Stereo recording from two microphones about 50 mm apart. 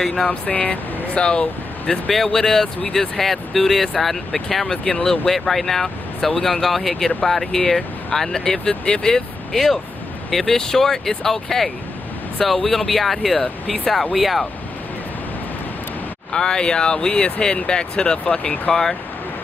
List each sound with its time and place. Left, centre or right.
0.0 s speech: centre
0.3 s speech: left
2.1 s speech: centre
16.3 s speech: centre